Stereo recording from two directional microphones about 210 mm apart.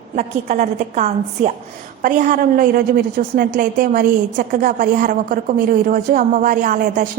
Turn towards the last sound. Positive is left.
turn(degrees=-40)  # may be behind; listen again after turning